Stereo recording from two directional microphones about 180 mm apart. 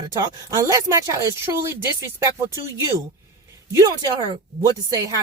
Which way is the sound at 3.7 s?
20° right (ahead or behind).